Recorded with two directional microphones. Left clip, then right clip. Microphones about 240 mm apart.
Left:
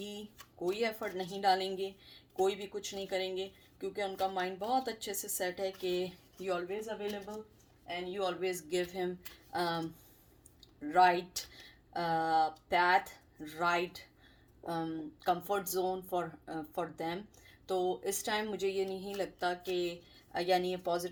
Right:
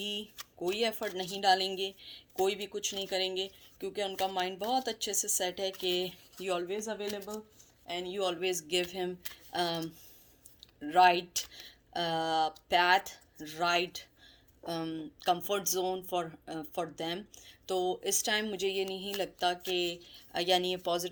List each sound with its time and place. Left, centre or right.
0.7 s speech: right
7.9 s speech: right